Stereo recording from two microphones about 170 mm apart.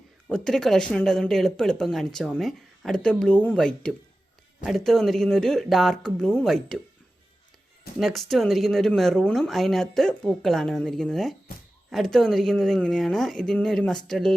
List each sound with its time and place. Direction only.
0.3 s speech: 5° left (ahead or behind)
7.9 s speech: centre (ahead or behind)